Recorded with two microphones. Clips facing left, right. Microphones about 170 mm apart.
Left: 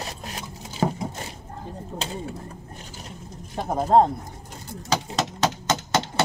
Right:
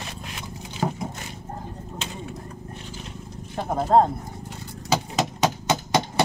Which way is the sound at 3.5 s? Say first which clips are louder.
Even; 15° left (ahead or behind).